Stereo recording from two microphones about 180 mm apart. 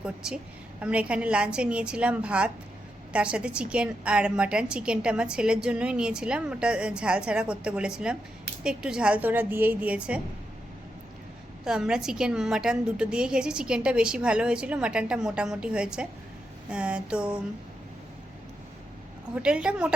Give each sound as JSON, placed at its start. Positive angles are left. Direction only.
{"t": 0.0, "sound": "a woman's voice", "side_deg": -5}
{"t": 11.6, "sound": "a woman's voice", "side_deg": -5}
{"t": 19.4, "sound": "a woman's voice", "side_deg": -5}